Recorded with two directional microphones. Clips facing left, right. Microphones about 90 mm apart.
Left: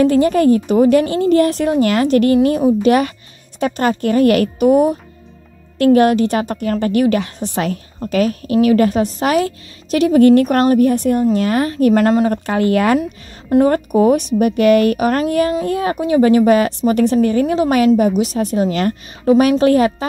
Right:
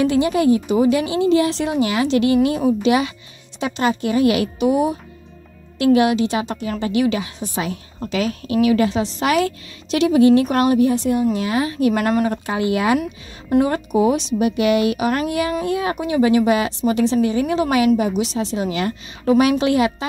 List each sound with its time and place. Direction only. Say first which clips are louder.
0.0 s speech: left 4 dB; 45° left (ahead or behind)
2.8 s speech: left 4 dB; 55° left (ahead or behind)
8.1 s speech: left 5 dB; 45° left (ahead or behind)
12.3 s speech: left 4 dB; 50° left (ahead or behind)
19.2 s a woman's voice: left 4 dB; 35° left (ahead or behind)